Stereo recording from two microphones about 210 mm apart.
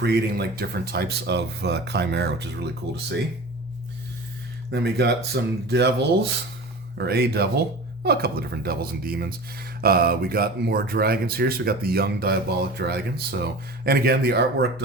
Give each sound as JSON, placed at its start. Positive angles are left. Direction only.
{"t": 0.0, "sound": "speech", "side_deg": -50}
{"t": 4.7, "sound": "speech", "side_deg": -50}